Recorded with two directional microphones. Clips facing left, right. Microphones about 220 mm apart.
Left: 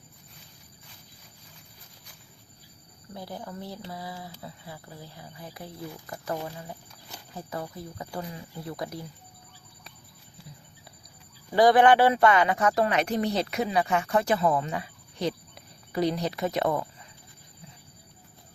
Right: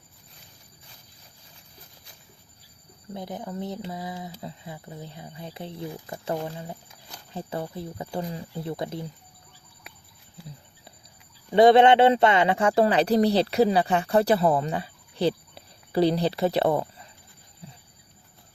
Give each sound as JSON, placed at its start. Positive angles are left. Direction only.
{"t": 3.2, "sound": "speech", "side_deg": -20}
{"t": 11.5, "sound": "speech", "side_deg": -25}